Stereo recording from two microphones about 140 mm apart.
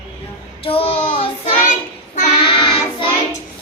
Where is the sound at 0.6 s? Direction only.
40° left (ahead or behind).